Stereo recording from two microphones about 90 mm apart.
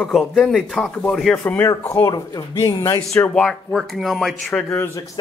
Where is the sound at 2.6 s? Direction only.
35° left (ahead or behind).